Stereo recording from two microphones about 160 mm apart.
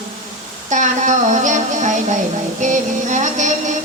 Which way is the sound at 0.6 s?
50° right (ahead or behind).